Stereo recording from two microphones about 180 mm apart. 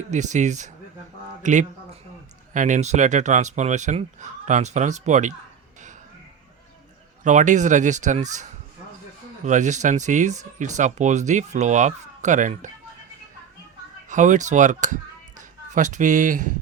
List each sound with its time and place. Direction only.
0.1 s speech: 40° right (ahead or behind)
7.3 s speech: 45° right (ahead or behind)
14.1 s a man's voice: 45° right (ahead or behind)